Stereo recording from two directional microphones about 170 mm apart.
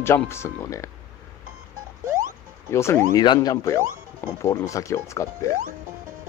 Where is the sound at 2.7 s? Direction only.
15° left (ahead or behind).